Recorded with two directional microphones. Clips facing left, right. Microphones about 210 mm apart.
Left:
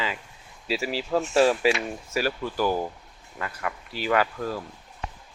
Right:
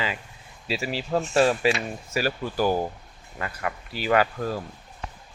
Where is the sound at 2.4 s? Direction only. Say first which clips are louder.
Right 1 dB; 40° right (ahead or behind).